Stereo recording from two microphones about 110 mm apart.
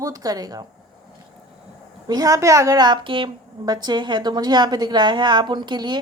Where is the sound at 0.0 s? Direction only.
35° right (ahead or behind).